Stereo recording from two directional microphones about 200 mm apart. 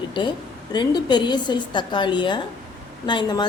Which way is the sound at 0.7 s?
20° left (ahead or behind).